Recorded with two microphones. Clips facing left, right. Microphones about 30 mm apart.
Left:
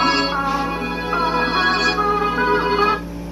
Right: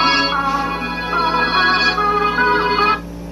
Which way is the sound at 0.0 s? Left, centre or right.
Right.